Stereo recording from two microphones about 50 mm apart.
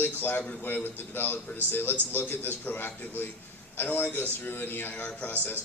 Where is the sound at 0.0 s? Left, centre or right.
Left.